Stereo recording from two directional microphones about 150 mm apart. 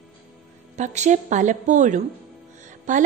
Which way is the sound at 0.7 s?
50° right (ahead or behind).